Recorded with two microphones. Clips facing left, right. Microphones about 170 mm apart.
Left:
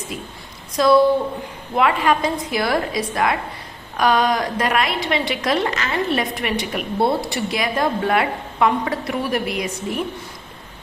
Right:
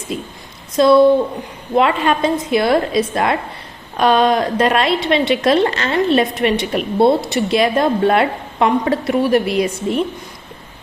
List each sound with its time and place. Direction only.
0.1 s a woman's voice: 25° right (ahead or behind)